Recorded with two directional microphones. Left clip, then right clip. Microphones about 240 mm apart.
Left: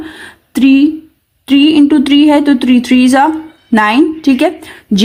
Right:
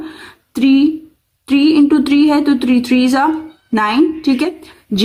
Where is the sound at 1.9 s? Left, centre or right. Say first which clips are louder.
Left 4 dB; left.